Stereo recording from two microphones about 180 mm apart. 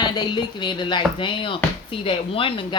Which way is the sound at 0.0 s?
25° left (ahead or behind).